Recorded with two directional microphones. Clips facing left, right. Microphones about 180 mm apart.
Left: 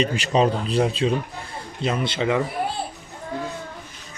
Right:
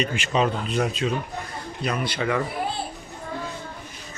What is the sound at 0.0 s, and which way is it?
A man's voice, 35° left (ahead or behind).